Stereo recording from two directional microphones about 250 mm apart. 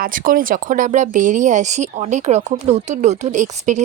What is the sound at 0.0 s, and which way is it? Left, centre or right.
Speech, right.